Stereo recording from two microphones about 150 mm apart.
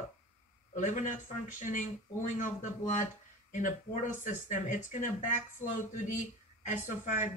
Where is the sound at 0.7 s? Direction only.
55° left (ahead or behind).